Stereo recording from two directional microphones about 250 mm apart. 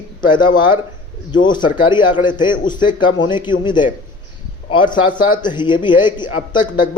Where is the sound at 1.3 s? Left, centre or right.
Centre.